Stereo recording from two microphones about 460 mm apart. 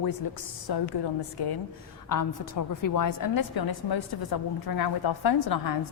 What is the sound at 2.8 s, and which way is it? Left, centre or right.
A woman's voice, left.